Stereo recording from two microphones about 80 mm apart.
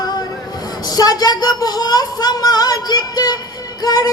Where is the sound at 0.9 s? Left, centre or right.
Left.